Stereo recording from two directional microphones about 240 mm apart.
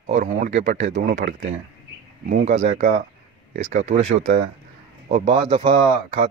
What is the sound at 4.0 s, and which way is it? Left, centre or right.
Speech, right.